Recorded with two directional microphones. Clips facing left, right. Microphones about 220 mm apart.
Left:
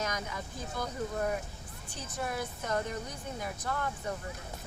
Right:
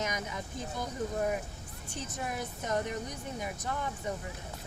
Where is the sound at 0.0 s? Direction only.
20° right (ahead or behind).